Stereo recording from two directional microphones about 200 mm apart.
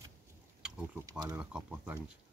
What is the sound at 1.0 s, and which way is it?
Speech, 15° right (ahead or behind).